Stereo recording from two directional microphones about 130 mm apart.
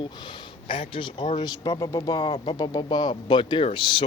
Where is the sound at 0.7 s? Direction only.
40° left (ahead or behind).